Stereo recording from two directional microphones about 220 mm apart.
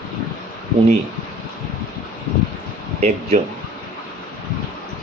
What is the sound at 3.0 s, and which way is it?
Speech, 30° right (ahead or behind).